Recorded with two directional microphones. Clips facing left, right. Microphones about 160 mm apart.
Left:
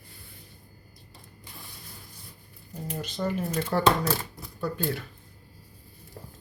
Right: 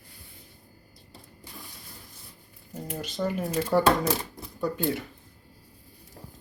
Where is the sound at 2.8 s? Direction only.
10° right (ahead or behind).